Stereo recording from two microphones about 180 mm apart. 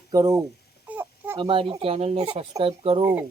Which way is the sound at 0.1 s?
20° right (ahead or behind).